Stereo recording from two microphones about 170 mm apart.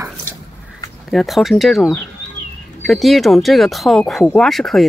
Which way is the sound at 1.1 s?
Centre (ahead or behind).